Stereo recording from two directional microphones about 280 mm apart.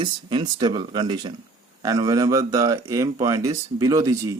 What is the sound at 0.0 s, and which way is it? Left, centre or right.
Speech, centre.